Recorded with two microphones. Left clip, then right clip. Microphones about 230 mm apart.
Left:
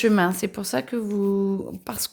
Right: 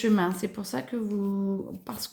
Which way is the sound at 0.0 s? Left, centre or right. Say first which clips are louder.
Left 6 dB; left.